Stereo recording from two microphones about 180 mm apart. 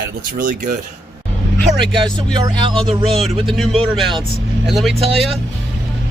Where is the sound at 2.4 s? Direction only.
30° right (ahead or behind).